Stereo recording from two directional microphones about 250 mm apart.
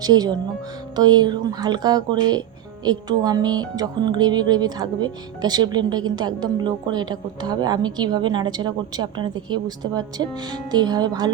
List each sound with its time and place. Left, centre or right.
0.0 s speech: centre